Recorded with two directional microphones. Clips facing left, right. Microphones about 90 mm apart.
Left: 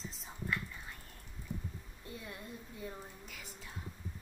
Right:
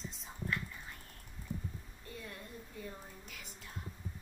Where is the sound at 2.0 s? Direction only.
20° left (ahead or behind).